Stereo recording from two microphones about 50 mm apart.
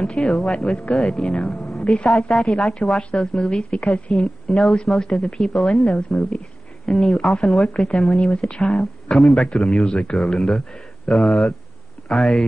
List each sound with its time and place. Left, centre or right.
0.0 s a woman's voice: centre
4.8 s a woman's voice: centre